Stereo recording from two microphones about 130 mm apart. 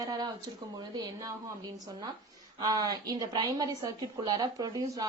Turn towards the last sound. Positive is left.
turn(degrees=-30)  # may be behind; listen again after turning